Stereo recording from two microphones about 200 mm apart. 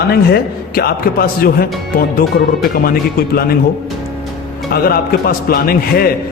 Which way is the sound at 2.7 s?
50° left (ahead or behind).